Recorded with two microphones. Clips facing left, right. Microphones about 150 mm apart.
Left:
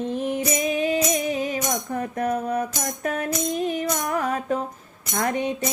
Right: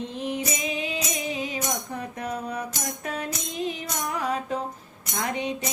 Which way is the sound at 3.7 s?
50° left (ahead or behind).